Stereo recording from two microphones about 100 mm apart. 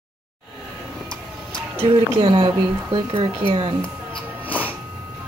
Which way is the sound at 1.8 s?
70° right (ahead or behind).